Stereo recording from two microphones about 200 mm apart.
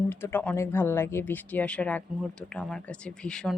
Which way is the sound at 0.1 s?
10° left (ahead or behind).